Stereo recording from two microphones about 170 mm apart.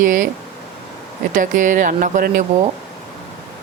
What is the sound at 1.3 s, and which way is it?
Speech, 50° right (ahead or behind).